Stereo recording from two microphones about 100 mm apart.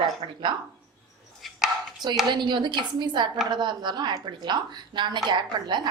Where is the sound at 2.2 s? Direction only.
50° right (ahead or behind).